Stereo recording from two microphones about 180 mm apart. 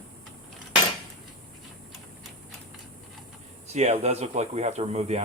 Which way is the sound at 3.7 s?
40° right (ahead or behind).